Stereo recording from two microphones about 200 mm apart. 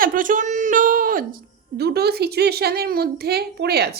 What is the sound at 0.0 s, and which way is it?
A woman's voice, 45° right (ahead or behind).